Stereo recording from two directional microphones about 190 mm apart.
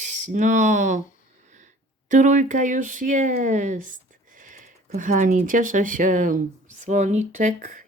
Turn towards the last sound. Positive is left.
turn(degrees=-45)  # may be behind; listen again after turning